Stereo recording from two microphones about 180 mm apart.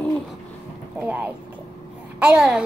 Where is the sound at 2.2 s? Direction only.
5° right (ahead or behind).